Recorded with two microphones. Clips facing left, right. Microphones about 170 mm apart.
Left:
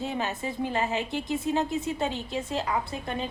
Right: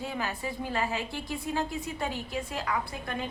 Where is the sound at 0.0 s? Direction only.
25° left (ahead or behind).